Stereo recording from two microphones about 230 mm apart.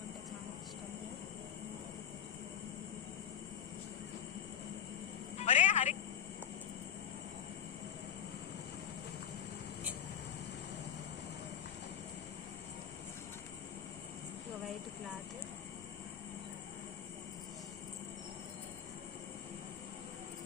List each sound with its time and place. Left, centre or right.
5.4 s music: left